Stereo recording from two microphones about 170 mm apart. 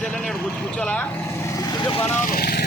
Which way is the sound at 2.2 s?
55° left (ahead or behind).